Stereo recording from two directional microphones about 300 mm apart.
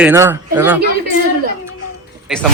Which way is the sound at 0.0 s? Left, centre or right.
Centre.